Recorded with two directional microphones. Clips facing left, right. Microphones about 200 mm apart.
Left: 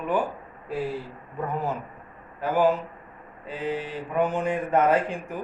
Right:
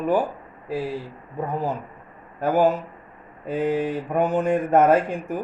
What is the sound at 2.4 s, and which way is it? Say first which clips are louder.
Speech: right 3 dB; 45° right (ahead or behind).